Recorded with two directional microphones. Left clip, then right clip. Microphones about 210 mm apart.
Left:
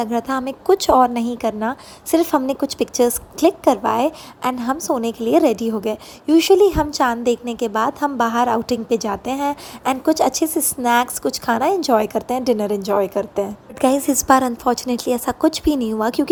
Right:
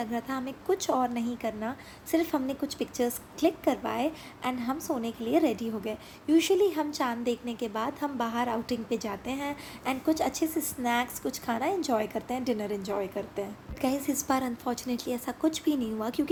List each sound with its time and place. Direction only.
0.0 s a woman's voice: 40° left (ahead or behind)